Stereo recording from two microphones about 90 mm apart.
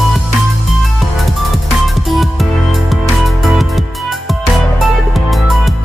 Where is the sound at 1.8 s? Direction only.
Centre (ahead or behind).